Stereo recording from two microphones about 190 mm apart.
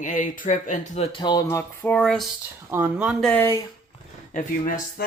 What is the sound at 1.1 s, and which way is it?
Speech, 20° left (ahead or behind).